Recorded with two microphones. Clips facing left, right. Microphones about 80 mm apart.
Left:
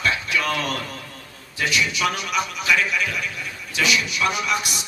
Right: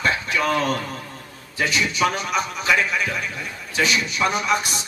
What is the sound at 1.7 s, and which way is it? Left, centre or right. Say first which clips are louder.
Speech: right 1 dB; right.